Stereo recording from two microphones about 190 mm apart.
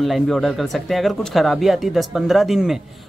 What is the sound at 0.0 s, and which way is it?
Speech, centre (ahead or behind).